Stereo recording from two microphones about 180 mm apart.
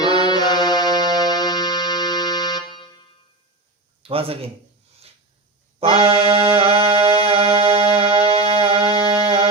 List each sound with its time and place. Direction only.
0.2 s music: 25° left (ahead or behind)
4.0 s a man's voice: 30° right (ahead or behind)
5.8 s music: 30° right (ahead or behind)